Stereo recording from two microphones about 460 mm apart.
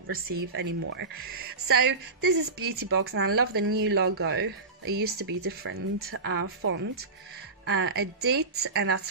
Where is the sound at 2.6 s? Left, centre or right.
Right.